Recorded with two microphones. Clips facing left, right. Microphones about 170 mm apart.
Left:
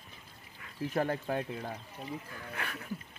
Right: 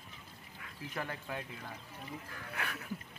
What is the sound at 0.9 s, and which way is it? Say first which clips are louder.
Speech: left 9 dB; 40° left (ahead or behind).